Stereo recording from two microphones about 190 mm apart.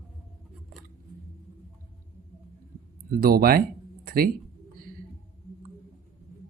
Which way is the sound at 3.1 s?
50° right (ahead or behind).